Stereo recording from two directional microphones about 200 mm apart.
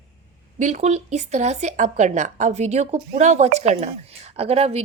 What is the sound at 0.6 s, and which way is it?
Speech, 35° right (ahead or behind).